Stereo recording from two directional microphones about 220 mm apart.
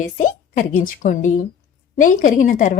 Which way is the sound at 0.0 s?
35° left (ahead or behind).